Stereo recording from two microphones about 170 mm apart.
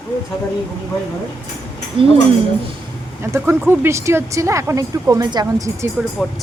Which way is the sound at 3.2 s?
15° right (ahead or behind).